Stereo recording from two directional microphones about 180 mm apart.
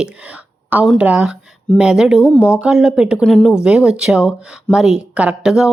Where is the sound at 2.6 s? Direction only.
5° right (ahead or behind).